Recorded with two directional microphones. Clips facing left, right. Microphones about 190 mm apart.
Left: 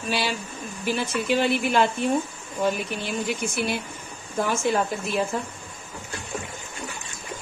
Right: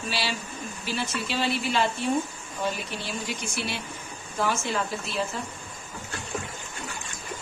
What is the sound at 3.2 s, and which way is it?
Speech, 55° left (ahead or behind).